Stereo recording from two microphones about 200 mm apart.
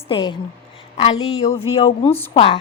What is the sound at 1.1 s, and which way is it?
Speech, 85° left.